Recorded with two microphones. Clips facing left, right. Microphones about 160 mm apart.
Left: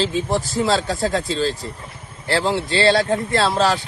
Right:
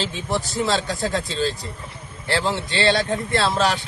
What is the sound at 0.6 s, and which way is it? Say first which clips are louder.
Speech: left 3 dB; 35° left (ahead or behind).